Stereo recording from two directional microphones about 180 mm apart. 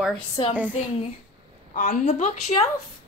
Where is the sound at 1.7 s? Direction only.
45° left (ahead or behind).